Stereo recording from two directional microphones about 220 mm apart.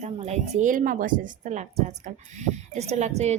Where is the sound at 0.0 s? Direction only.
30° right (ahead or behind).